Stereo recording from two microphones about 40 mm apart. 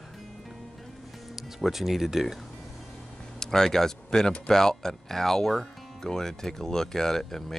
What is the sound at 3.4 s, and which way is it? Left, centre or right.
Speech, centre.